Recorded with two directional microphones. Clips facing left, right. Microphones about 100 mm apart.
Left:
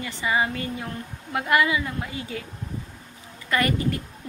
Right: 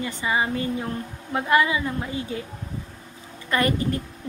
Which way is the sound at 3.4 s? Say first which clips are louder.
Right 1 dB; 25° right (ahead or behind).